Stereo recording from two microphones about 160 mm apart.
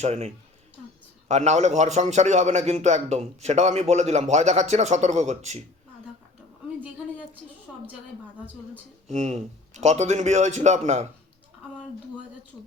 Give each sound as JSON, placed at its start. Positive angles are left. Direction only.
{"t": 0.0, "sound": "speech", "side_deg": -40}
{"t": 1.3, "sound": "a man's voice", "side_deg": -45}
{"t": 9.0, "sound": "a man's voice", "side_deg": -45}